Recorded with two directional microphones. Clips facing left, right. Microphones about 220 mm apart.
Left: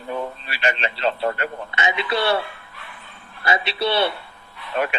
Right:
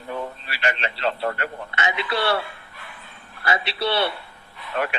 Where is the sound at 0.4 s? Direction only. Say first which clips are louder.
Left 2 dB; 20° left (ahead or behind).